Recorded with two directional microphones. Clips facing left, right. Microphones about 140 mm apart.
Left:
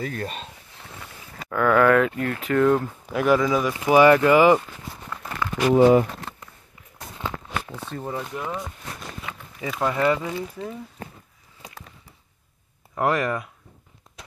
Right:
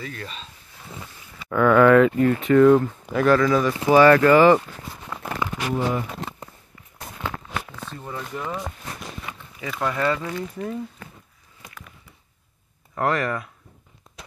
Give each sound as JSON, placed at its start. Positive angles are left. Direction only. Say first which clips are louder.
{"t": 0.0, "sound": "speech", "louder": "left 5 dB", "side_deg": 45}
{"t": 1.5, "sound": "speech", "louder": "right 3 dB", "side_deg": 0}
{"t": 5.8, "sound": "speech", "louder": "left 11 dB", "side_deg": 65}
{"t": 7.7, "sound": "speech", "louder": "left 4 dB", "side_deg": 20}
{"t": 9.6, "sound": "speech", "louder": "left 2 dB", "side_deg": 10}
{"t": 11.6, "sound": "a sound", "louder": "left 2 dB", "side_deg": 35}
{"t": 12.9, "sound": "speech", "louder": "left 1 dB", "side_deg": 15}